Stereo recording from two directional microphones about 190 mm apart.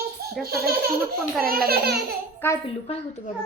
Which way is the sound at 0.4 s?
55° right (ahead or behind).